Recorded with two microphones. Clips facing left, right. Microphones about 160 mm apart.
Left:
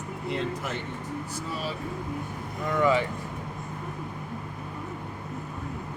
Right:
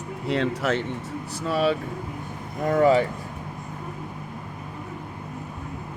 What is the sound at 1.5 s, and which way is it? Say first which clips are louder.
Speech: right 13 dB; 70° right (ahead or behind).